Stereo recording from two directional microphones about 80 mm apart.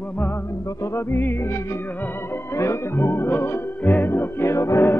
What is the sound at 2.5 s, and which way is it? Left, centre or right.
Music, left.